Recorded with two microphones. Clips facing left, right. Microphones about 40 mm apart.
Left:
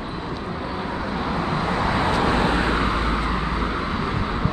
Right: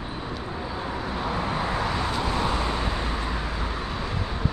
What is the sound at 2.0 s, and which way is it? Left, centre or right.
Vehicle, left.